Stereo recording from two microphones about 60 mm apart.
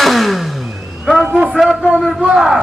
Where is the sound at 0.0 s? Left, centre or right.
Centre.